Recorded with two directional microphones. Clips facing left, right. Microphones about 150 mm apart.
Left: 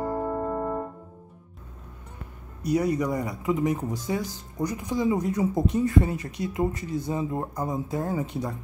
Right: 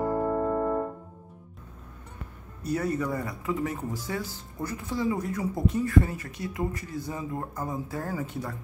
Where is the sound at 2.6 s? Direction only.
15° left (ahead or behind).